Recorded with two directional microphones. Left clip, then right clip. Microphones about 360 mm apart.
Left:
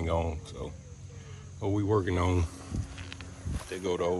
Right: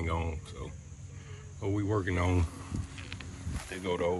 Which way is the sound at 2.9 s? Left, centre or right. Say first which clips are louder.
Even; left.